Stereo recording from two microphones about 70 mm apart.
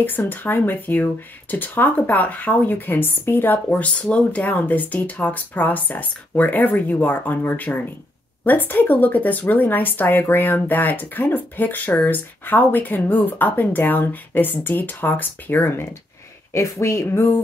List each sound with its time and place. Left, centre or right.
0.2 s a woman's voice: left